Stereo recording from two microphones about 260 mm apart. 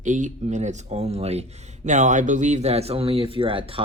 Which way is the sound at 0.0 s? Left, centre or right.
Right.